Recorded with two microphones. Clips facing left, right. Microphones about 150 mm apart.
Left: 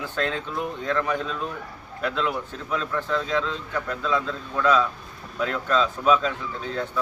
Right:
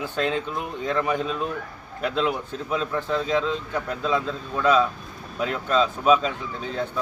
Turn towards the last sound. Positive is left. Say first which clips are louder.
# right 1 dB
turn(degrees=-20)  # may be behind; listen again after turning